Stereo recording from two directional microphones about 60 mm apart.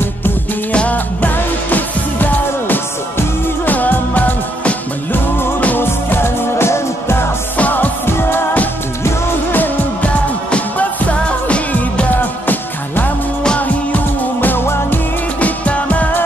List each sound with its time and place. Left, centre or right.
0.7 s music: left
7.5 s music: left
15.4 s music: left